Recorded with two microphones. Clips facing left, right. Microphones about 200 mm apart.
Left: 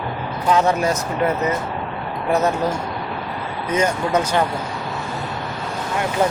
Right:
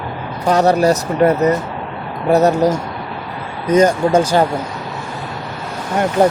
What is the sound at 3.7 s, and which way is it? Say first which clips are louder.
Speech: right 8 dB; 35° right (ahead or behind).